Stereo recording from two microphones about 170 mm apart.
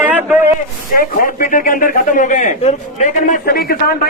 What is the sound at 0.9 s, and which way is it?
Speech, 55° left (ahead or behind).